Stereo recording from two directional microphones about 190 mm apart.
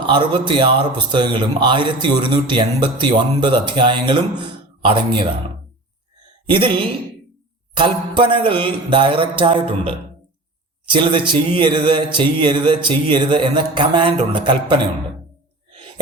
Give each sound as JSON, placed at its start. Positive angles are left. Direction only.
{"t": 0.0, "sound": "speech", "side_deg": -25}
{"t": 6.5, "sound": "speech", "side_deg": -25}